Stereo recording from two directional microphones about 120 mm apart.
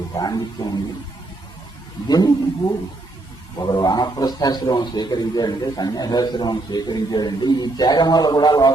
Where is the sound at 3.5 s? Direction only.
35° left (ahead or behind).